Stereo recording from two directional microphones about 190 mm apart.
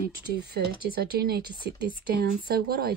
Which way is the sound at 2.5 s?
55° right (ahead or behind).